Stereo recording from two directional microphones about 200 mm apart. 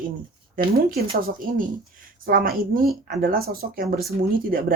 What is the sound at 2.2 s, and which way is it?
Speech, 45° right (ahead or behind).